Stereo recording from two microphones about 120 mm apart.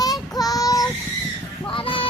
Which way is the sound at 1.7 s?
45° left (ahead or behind).